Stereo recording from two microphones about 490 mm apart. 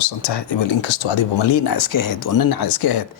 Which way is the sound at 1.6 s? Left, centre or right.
Left.